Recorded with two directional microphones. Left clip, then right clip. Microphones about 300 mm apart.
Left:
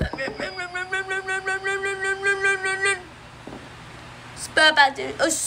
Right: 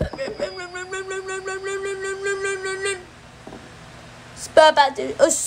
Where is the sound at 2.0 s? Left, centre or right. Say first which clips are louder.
Left 3 dB; centre.